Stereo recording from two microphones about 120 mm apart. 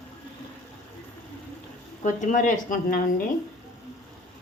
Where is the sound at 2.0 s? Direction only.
90° left.